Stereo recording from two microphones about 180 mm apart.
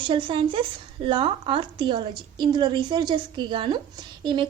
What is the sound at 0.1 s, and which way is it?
Speech, 30° right (ahead or behind).